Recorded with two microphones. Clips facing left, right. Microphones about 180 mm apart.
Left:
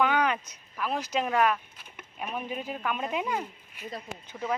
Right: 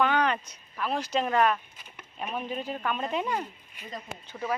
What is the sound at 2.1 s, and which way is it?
Speech, 5° left (ahead or behind).